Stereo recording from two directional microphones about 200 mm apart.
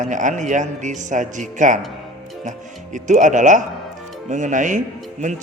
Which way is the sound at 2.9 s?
40° right (ahead or behind).